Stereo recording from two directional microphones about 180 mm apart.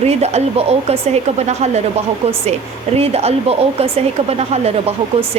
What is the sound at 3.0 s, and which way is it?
Speech, 35° right (ahead or behind).